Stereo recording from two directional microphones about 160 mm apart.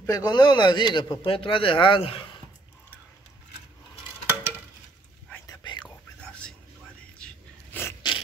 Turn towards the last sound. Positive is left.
turn(degrees=15)  # may be behind; listen again after turning